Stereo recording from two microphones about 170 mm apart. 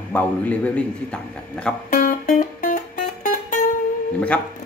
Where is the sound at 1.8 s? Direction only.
50° left (ahead or behind).